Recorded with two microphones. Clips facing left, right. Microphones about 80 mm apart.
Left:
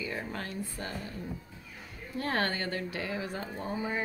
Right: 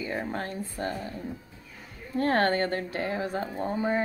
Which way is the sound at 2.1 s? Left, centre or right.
Right.